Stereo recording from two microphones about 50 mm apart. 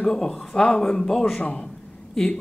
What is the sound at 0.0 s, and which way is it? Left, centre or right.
Speech, centre.